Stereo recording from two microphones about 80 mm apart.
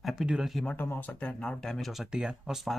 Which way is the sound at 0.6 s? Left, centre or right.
Left.